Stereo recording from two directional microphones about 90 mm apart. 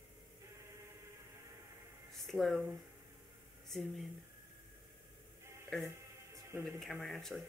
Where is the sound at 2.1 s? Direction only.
Centre (ahead or behind).